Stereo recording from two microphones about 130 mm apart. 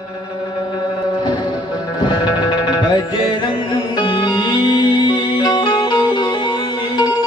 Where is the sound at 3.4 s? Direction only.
40° left (ahead or behind).